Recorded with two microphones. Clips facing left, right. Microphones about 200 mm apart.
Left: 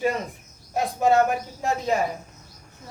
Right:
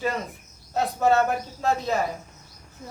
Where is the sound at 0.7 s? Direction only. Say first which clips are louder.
Left 1 dB; 15° left (ahead or behind).